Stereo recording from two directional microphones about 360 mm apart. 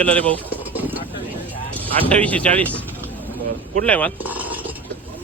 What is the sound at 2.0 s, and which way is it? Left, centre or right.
Speech, centre.